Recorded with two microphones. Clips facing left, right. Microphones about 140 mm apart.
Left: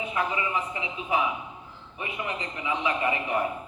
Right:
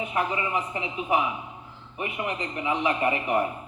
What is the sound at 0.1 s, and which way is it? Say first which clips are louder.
A man's voice: right 1 dB; 30° right (ahead or behind).